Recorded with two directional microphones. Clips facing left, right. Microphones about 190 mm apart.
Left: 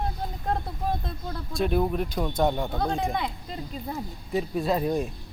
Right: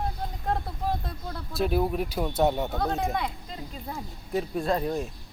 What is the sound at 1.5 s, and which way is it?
Speech, 5° right (ahead or behind).